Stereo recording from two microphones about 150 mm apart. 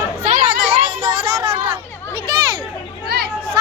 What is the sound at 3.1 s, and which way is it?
Chatter, 90° right.